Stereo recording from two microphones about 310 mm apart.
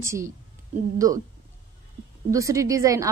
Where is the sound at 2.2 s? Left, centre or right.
Centre.